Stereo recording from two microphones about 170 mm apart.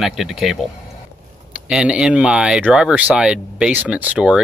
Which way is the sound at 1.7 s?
5° right (ahead or behind).